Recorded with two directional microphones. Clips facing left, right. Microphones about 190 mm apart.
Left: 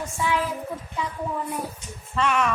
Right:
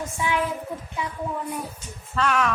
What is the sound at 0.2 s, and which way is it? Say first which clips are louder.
Speech: even; 20° right (ahead or behind).